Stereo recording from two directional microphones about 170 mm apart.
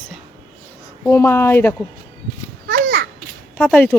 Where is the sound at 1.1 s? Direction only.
15° left (ahead or behind).